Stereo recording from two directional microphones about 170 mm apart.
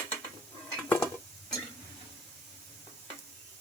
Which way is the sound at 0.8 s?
10° left (ahead or behind).